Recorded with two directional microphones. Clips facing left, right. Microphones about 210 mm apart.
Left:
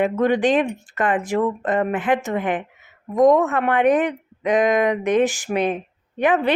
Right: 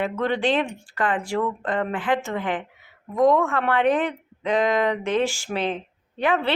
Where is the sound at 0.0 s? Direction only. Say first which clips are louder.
Left 5 dB; 15° left (ahead or behind).